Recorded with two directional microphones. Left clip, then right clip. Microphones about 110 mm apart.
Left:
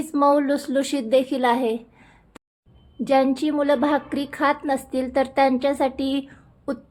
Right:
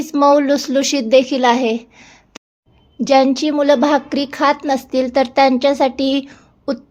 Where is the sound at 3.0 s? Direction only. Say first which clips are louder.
Right 7 dB; 30° right (ahead or behind).